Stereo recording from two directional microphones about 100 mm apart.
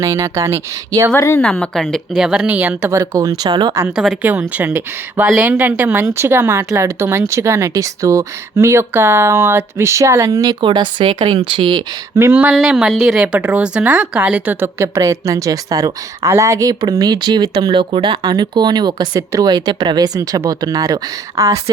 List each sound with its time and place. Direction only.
0.0 s speech: 30° right (ahead or behind)
1.4 s speech: 10° left (ahead or behind); by 2.9 s 15° right (ahead or behind)
2.9 s speech: 35° right (ahead or behind)
3.9 s speech: 5° right (ahead or behind)
4.2 s speech: 15° right (ahead or behind); by 10.6 s 40° right (ahead or behind)
10.6 s speech: 55° right (ahead or behind)
12.1 s speech: 25° right (ahead or behind)
12.5 s speech: 5° right (ahead or behind); by 17.5 s 45° right (ahead or behind)
17.5 s speech: 60° right (ahead or behind); by 21.6 s 35° right (ahead or behind)